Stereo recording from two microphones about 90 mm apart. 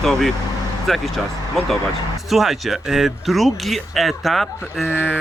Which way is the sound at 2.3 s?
Centre (ahead or behind).